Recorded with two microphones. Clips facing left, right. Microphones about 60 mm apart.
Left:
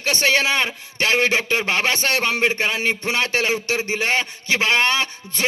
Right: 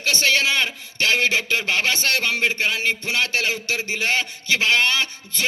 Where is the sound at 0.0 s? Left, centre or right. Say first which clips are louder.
Left 1 dB; left.